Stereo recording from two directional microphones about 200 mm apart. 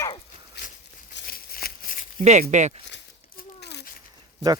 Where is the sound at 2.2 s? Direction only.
35° right (ahead or behind).